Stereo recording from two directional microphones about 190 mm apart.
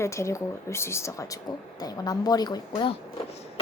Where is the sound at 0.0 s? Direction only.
15° left (ahead or behind).